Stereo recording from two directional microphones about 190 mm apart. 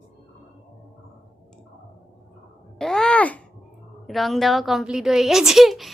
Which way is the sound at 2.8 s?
5° left (ahead or behind).